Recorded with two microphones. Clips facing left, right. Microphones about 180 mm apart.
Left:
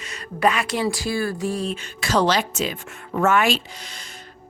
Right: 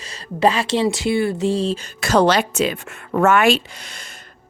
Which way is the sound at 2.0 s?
55° right (ahead or behind).